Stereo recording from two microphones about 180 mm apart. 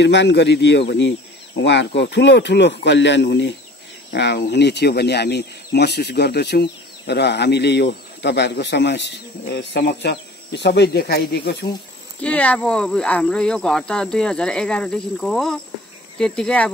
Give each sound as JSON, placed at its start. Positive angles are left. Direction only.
{"t": 0.0, "sound": "speech", "side_deg": 75}
{"t": 4.1, "sound": "speech", "side_deg": 65}
{"t": 12.2, "sound": "speech", "side_deg": 5}